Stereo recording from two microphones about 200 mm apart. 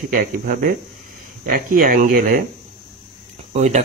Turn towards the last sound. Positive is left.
turn(degrees=-35)  # may be behind; listen again after turning